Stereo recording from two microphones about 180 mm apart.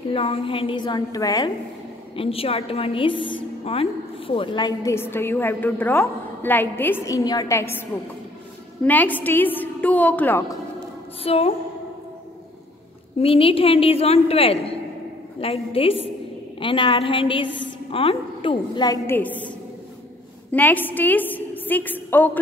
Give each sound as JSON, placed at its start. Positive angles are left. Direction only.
{"t": 0.1, "sound": "a woman's voice", "side_deg": 30}
{"t": 2.1, "sound": "a woman's voice", "side_deg": 30}
{"t": 8.8, "sound": "a woman's voice", "side_deg": 10}
{"t": 11.2, "sound": "a woman's voice", "side_deg": 35}
{"t": 13.2, "sound": "a woman's voice", "side_deg": 30}
{"t": 17.5, "sound": "a woman's voice", "side_deg": 90}
{"t": 17.9, "sound": "a woman's voice", "side_deg": 30}
{"t": 19.0, "sound": "a woman's voice", "side_deg": 10}
{"t": 20.5, "sound": "a woman's voice", "side_deg": 10}